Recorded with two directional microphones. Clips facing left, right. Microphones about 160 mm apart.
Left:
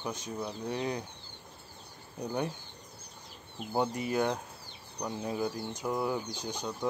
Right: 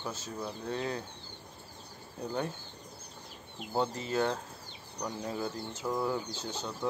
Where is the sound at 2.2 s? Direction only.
15° left (ahead or behind).